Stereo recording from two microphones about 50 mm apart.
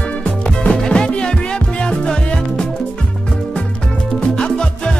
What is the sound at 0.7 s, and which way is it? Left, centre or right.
Music, centre.